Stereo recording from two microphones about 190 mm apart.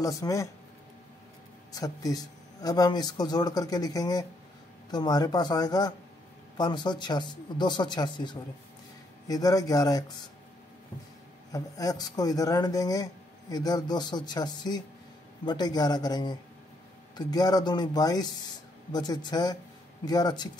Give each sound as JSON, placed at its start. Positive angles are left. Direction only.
{"t": 0.0, "sound": "speech", "side_deg": 15}
{"t": 1.7, "sound": "speech", "side_deg": 20}
{"t": 11.5, "sound": "speech", "side_deg": 20}